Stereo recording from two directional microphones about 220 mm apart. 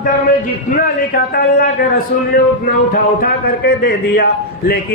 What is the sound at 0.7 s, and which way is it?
A man's voice, 40° left (ahead or behind).